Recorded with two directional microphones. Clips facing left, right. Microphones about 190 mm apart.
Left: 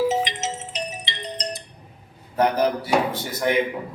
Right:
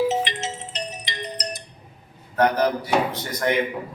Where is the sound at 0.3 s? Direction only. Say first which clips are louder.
Left 1 dB; 15° left (ahead or behind).